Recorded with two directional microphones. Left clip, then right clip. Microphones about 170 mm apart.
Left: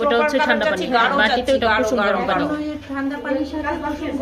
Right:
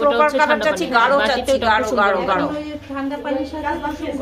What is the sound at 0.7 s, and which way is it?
Speech, 85° right.